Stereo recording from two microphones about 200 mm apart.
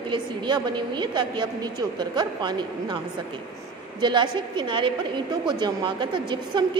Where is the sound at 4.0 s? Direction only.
25° right (ahead or behind).